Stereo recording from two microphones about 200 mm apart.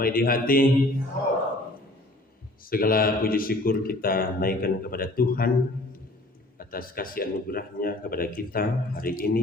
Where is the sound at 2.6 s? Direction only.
45° left (ahead or behind).